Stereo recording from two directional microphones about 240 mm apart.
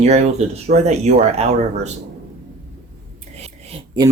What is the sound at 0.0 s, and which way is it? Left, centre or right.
Speech, right.